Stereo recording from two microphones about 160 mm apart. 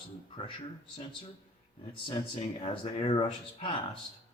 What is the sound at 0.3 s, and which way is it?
Speech, 30° left (ahead or behind).